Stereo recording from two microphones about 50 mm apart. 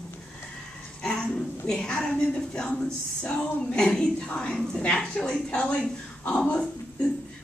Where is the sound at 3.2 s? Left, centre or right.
Centre.